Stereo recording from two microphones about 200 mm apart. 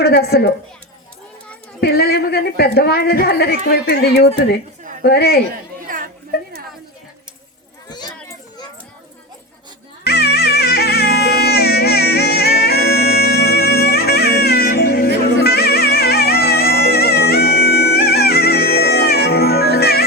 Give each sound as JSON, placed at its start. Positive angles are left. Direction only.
{"t": 0.0, "sound": "a woman's voice", "side_deg": 55}
{"t": 1.8, "sound": "a woman's voice", "side_deg": 50}
{"t": 5.9, "sound": "chatter", "side_deg": -45}
{"t": 7.9, "sound": "children playing", "side_deg": 20}
{"t": 10.1, "sound": "music", "side_deg": 55}